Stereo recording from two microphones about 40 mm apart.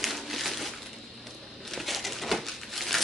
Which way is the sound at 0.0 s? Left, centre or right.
Centre.